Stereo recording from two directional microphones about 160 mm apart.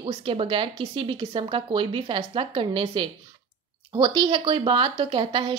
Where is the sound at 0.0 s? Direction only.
35° right (ahead or behind).